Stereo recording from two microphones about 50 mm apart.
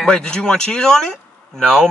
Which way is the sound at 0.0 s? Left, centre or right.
Centre.